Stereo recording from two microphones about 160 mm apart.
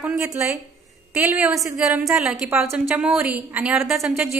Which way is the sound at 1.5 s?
20° right (ahead or behind).